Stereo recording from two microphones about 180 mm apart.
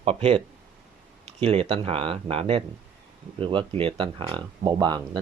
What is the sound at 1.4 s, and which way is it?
Speech, 30° right (ahead or behind).